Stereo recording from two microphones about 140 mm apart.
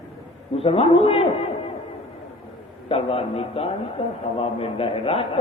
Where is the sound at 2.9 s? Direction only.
45° left (ahead or behind).